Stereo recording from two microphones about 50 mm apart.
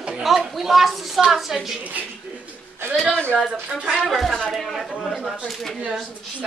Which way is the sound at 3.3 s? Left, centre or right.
Centre.